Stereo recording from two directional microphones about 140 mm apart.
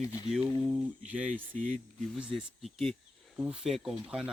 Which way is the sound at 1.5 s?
65° right (ahead or behind).